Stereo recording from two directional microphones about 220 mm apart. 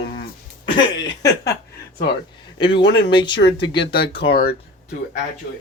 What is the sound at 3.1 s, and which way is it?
Speech, 20° left (ahead or behind).